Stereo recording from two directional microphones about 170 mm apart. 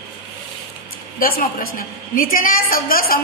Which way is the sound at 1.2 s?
55° left (ahead or behind).